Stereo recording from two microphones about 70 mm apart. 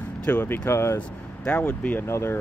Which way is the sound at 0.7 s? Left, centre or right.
Left.